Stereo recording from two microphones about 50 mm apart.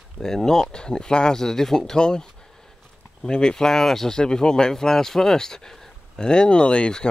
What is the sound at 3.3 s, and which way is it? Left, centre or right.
Speech, centre.